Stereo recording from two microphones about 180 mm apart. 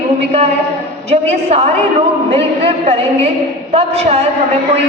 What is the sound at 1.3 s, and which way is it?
A man's voice, 35° right (ahead or behind).